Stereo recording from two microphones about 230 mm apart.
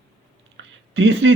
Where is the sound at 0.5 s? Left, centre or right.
Right.